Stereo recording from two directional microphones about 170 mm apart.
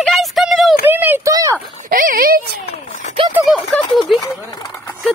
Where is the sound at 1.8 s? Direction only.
55° right (ahead or behind).